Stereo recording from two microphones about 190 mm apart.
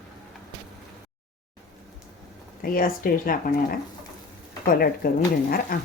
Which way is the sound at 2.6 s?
50° left (ahead or behind).